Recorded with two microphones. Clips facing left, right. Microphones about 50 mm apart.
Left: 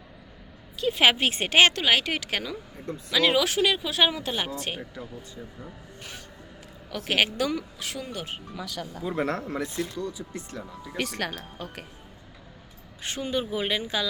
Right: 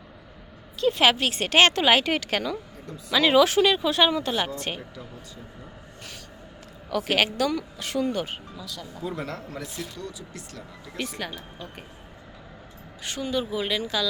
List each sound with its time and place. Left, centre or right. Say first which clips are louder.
0.8 s a woman's voice: right 4 dB; centre
1.0 s speech: left 2 dB; left
1.5 s a woman's voice: right 1 dB; centre
1.7 s speech: right 3 dB; centre
6.0 s a sound: left 1 dB; left
6.9 s a woman's voice: right 2 dB; centre
7.8 s speech: right 8 dB; centre
8.5 s speech: left 3 dB; left
9.1 s speech: left 6 dB; left
10.0 s speech: left 4 dB; left
10.9 s speech: left 2 dB; left
13.0 s speech: right 1 dB; left